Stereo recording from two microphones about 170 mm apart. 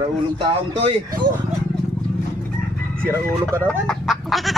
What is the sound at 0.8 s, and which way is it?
Speech, 35° right (ahead or behind).